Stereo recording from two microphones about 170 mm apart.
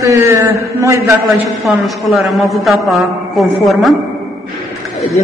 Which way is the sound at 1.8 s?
Centre (ahead or behind).